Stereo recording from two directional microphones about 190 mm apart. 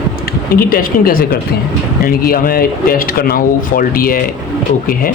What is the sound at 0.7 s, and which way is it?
Speech, 50° left (ahead or behind).